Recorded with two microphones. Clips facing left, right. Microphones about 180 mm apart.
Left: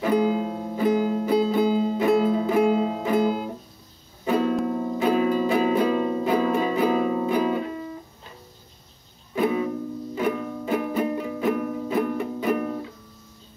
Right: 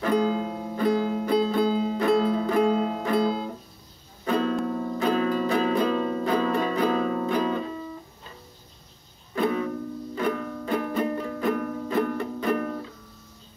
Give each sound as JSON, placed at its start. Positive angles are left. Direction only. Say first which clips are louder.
{"t": 0.0, "sound": "music", "louder": "left 2 dB", "side_deg": 10}
{"t": 9.3, "sound": "music", "louder": "left 2 dB", "side_deg": 10}